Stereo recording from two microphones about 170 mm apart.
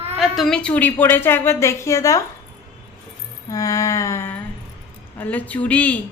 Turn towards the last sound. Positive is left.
turn(degrees=10)  # may be behind; listen again after turning